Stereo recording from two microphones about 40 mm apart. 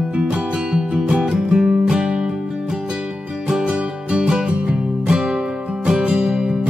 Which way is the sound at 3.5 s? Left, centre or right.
Right.